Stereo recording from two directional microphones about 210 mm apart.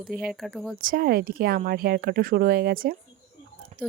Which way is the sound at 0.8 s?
45° right (ahead or behind).